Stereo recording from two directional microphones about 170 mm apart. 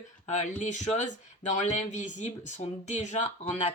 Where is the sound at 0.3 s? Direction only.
45° left (ahead or behind).